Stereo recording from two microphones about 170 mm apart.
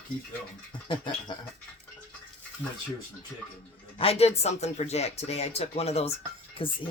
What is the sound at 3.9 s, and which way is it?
Speech, 35° left (ahead or behind).